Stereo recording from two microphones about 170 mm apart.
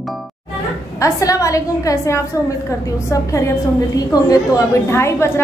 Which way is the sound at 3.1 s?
20° left (ahead or behind).